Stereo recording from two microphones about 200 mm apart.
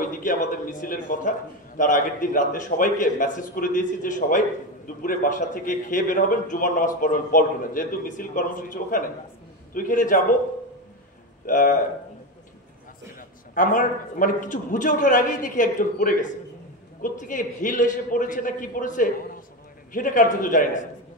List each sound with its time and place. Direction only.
0.0 s a man's voice: 40° left (ahead or behind)
11.4 s a man's voice: 40° left (ahead or behind)
13.6 s a man's voice: 40° left (ahead or behind)